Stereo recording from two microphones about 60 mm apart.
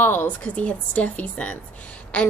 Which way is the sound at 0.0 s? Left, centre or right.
Left.